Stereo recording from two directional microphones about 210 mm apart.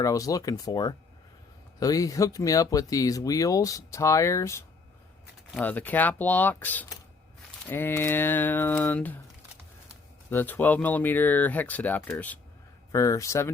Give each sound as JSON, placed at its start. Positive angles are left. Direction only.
{"t": 0.0, "sound": "speech", "side_deg": 15}
{"t": 10.2, "sound": "speech", "side_deg": 10}